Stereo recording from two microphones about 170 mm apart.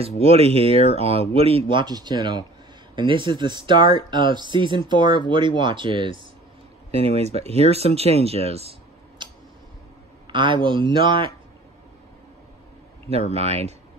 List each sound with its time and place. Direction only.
0.2 s speech: 35° right (ahead or behind)
10.2 s speech: 30° right (ahead or behind)
13.3 s speech: 40° right (ahead or behind)